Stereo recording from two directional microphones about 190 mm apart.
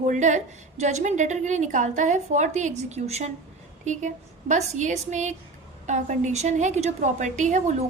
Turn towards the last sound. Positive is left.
turn(degrees=-40)  # may be behind; listen again after turning